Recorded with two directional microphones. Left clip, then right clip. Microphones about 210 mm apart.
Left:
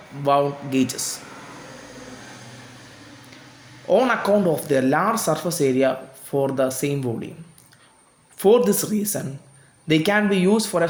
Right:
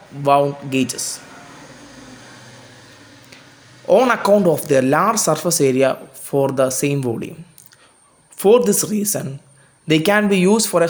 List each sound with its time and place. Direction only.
0.2 s speech: 20° right (ahead or behind)
3.8 s speech: 20° right (ahead or behind)
8.4 s speech: 15° right (ahead or behind)